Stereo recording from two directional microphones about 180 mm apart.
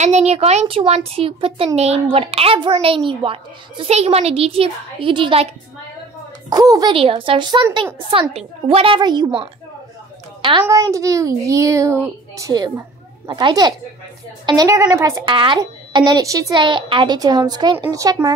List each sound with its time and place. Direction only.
0.0 s a child's voice: 40° right (ahead or behind)
6.5 s speech: 20° right (ahead or behind)
10.6 s a child's voice: 20° right (ahead or behind)